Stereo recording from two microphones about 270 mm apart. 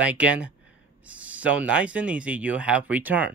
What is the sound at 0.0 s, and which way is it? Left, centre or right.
Speech, centre.